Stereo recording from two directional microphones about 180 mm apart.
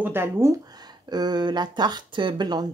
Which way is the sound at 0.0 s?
15° right (ahead or behind).